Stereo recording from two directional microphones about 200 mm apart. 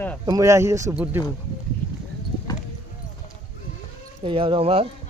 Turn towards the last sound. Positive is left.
turn(degrees=-30)  # may be behind; listen again after turning